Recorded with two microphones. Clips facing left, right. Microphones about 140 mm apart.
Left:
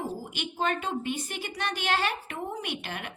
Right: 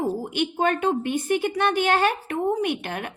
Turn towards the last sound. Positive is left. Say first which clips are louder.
# right 9 dB
turn(degrees=-50)  # may be behind; listen again after turning